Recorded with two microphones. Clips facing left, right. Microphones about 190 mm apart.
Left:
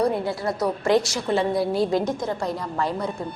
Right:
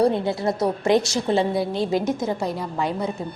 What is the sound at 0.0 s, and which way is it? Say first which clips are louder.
A woman's voice: right 3 dB; 25° right (ahead or behind).